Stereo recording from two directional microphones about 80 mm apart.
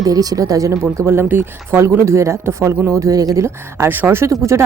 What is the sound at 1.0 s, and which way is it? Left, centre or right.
Speech, right.